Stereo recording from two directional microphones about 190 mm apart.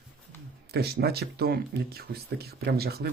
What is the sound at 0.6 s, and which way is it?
Speech, 55° right (ahead or behind).